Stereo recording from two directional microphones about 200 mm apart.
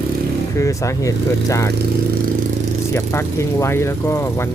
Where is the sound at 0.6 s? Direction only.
15° left (ahead or behind).